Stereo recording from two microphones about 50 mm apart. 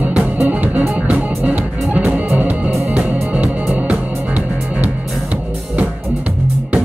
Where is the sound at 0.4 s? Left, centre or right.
Right.